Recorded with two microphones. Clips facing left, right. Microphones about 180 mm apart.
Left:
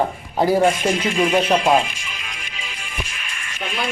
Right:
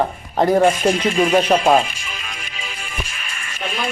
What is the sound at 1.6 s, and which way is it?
Music, 45° right (ahead or behind).